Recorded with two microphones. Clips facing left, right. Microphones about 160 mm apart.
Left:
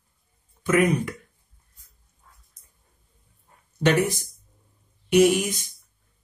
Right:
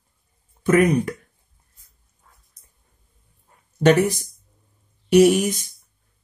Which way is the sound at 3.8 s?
40° right (ahead or behind).